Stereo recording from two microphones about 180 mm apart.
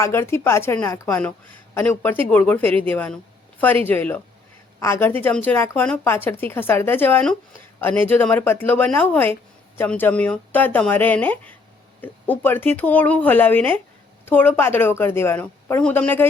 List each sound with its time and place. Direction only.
0.0 s speech: 15° left (ahead or behind)